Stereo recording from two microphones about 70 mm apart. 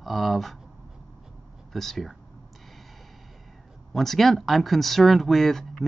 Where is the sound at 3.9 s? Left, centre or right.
Centre.